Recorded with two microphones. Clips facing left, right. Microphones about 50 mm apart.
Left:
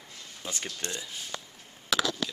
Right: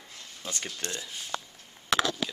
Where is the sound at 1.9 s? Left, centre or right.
Right.